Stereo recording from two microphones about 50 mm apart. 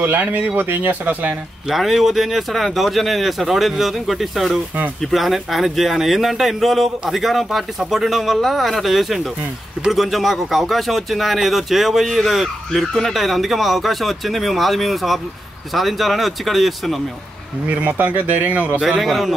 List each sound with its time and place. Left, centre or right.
0.0 s speech: right
1.7 s speech: centre
17.6 s speech: right
18.8 s speech: centre